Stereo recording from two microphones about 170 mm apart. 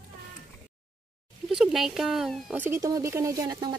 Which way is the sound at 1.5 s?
5° right (ahead or behind).